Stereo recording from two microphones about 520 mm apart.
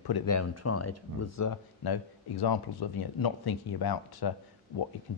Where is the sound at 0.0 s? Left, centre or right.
Left.